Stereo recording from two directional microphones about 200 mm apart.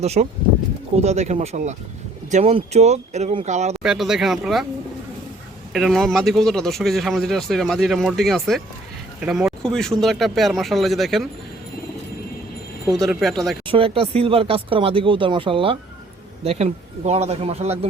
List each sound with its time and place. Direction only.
0.0 s speech: 30° right (ahead or behind)
3.8 s speech: centre (ahead or behind)
5.7 s speech: centre (ahead or behind)
13.1 s speech: centre (ahead or behind)
13.7 s speech: 25° right (ahead or behind)